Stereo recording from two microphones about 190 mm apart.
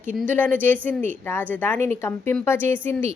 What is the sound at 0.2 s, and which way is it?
Speech, 10° left (ahead or behind).